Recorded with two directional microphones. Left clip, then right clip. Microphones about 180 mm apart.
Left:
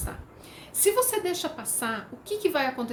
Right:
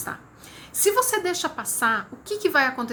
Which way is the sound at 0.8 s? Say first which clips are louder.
Right 3 dB; 30° left (ahead or behind).